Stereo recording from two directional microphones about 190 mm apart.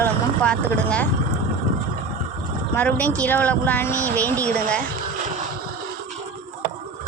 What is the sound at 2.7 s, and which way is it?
Speech, 10° left (ahead or behind).